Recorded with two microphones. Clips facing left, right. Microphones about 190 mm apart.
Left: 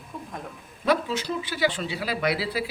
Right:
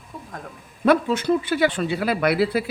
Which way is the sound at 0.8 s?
55° right (ahead or behind).